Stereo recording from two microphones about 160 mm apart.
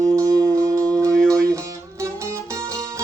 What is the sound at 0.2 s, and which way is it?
Music, 20° right (ahead or behind).